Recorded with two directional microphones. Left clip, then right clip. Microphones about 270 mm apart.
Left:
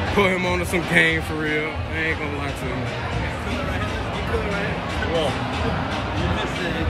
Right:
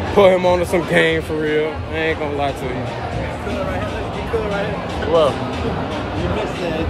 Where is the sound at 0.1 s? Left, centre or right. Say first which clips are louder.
Right 9 dB; centre.